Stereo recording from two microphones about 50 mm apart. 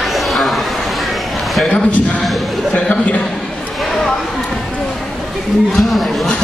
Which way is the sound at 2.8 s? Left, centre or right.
Left.